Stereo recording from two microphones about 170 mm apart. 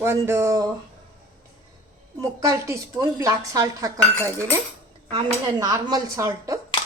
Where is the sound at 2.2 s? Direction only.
20° right (ahead or behind).